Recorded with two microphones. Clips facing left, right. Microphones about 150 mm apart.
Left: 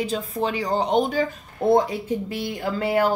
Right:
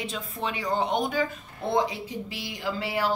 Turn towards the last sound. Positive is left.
turn(degrees=50)  # may be behind; listen again after turning